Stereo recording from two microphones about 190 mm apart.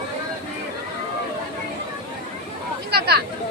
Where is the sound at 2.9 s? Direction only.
55° right (ahead or behind).